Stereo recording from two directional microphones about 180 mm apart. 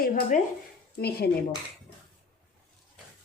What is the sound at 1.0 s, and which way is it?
Speech, 60° left (ahead or behind).